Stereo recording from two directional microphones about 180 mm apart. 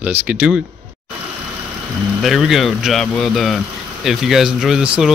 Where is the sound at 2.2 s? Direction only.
Centre (ahead or behind).